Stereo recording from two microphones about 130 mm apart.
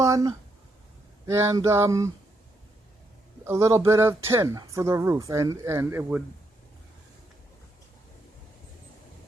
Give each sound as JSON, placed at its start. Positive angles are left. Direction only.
{"t": 0.0, "sound": "a sound", "side_deg": -30}
{"t": 1.3, "sound": "speech", "side_deg": -25}
{"t": 3.4, "sound": "speech", "side_deg": -20}